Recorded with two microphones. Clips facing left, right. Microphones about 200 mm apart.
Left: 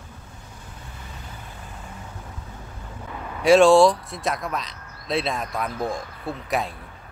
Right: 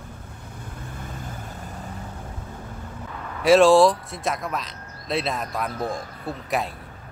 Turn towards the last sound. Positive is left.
turn(degrees=0)  # may be behind; listen again after turning